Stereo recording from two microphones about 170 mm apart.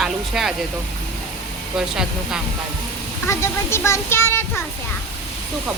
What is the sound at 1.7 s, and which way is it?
Speech, 5° right (ahead or behind).